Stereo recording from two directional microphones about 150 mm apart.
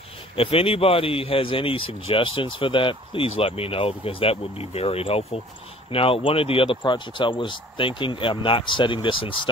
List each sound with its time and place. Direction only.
0.4 s speech: 40° left (ahead or behind)